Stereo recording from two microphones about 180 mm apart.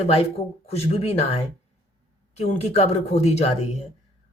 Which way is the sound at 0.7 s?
35° left (ahead or behind).